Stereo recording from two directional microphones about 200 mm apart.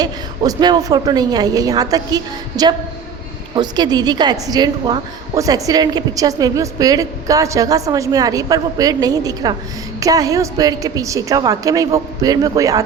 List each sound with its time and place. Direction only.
0.0 s a woman's voice: 20° right (ahead or behind)